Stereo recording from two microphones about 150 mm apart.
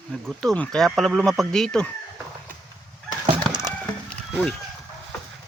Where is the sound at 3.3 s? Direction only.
30° right (ahead or behind).